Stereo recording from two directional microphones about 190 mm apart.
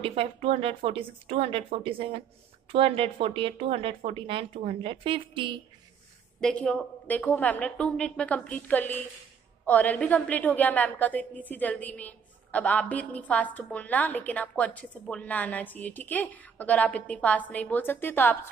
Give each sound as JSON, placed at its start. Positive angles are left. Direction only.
{"t": 0.0, "sound": "speech", "side_deg": -30}
{"t": 6.4, "sound": "a woman's voice", "side_deg": 5}